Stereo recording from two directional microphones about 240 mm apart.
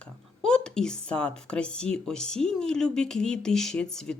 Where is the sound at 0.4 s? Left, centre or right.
Centre.